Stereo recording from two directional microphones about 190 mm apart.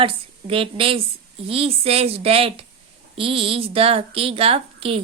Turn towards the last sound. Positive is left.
turn(degrees=-30)  # may be behind; listen again after turning